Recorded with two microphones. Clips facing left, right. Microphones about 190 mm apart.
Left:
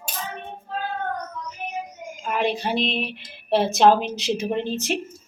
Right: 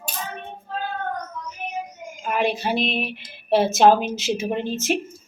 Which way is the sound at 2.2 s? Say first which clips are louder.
Right 1 dB; 5° right (ahead or behind).